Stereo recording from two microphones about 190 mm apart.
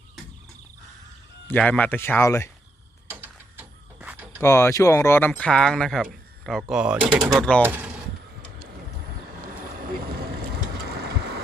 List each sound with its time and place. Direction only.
1.5 s speech: 5° left (ahead or behind)
3.1 s a sound: 10° right (ahead or behind)
4.4 s speech: 15° left (ahead or behind); by 7.0 s 5° right (ahead or behind)
7.1 s speech: 25° right (ahead or behind)
7.3 s speech: 5° left (ahead or behind)
9.2 s vehicle: 50° right (ahead or behind)